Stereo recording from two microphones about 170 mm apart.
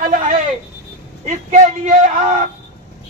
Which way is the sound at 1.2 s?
45° right (ahead or behind).